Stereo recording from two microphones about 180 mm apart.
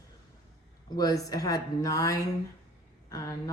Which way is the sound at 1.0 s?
20° left (ahead or behind).